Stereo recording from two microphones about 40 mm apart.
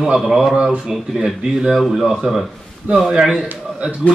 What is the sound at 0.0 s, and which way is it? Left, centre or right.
Speech, centre.